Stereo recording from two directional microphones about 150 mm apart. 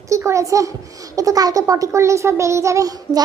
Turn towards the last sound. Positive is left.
turn(degrees=-25)  # may be behind; listen again after turning